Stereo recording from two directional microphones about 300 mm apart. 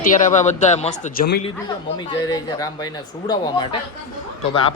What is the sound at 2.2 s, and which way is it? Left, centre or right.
Speech, centre.